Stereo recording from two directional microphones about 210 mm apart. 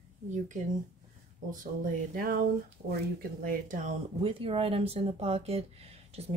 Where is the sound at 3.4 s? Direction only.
40° right (ahead or behind).